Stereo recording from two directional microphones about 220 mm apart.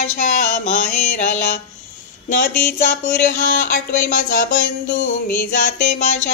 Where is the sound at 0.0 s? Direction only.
35° left (ahead or behind).